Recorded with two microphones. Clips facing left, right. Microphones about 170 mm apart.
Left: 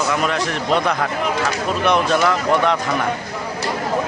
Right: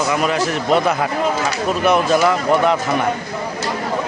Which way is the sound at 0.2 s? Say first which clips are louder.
Right 2 dB; 5° right (ahead or behind).